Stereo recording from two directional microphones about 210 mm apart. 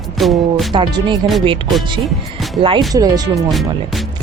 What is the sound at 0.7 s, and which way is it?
Speech, 20° right (ahead or behind).